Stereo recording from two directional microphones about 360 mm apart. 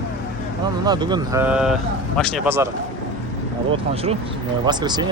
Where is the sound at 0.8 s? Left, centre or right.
Centre.